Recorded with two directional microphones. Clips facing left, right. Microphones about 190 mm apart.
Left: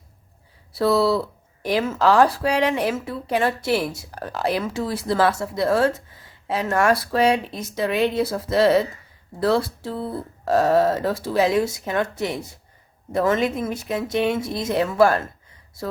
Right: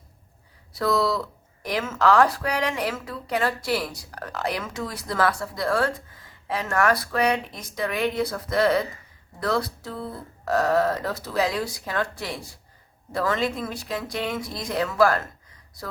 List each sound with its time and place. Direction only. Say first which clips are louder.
0.7 s speech: left 5 dB; 30° left (ahead or behind)